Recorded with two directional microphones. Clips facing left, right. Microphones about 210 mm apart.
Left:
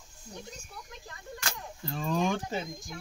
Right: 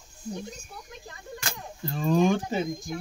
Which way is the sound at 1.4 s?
5° right (ahead or behind).